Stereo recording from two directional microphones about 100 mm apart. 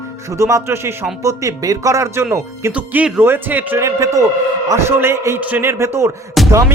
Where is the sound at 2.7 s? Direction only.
15° right (ahead or behind).